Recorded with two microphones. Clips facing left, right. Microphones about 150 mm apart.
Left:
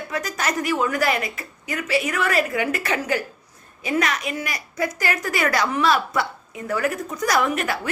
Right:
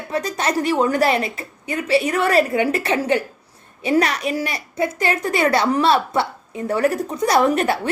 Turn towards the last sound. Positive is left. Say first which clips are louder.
# right 5 dB
turn(degrees=-35)  # may be behind; listen again after turning